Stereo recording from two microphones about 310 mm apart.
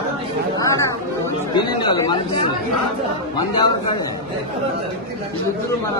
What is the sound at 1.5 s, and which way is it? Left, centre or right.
Speech, centre.